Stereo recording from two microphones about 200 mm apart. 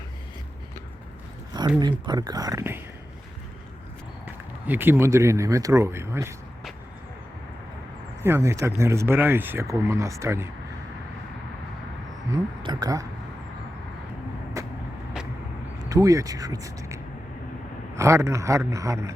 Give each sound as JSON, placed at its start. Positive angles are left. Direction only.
{"t": 1.8, "sound": "speech", "side_deg": -20}
{"t": 4.3, "sound": "speech", "side_deg": -10}
{"t": 8.2, "sound": "speech", "side_deg": -15}
{"t": 12.3, "sound": "speech", "side_deg": -20}
{"t": 14.6, "sound": "vehicle", "side_deg": -15}
{"t": 15.9, "sound": "speech", "side_deg": -15}